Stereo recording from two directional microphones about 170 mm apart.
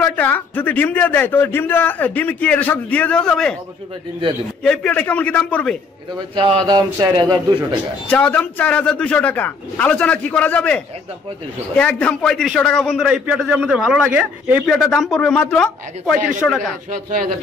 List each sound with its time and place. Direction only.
0.0 s a man's voice: 10° left (ahead or behind)
4.6 s a man's voice: 5° left (ahead or behind)
6.3 s speech: 30° right (ahead or behind)
8.1 s a man's voice: 10° left (ahead or behind)